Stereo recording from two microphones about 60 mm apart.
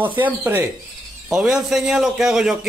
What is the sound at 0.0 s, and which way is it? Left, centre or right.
Speech, right.